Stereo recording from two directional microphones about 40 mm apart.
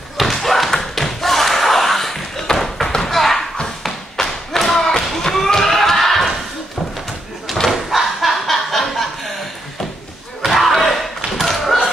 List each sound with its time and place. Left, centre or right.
0.2 s thump: centre
3.0 s slam: centre
3.6 s thump: centre
7.7 s a sound: centre
10.4 s battle cry: centre
11.3 s thump: centre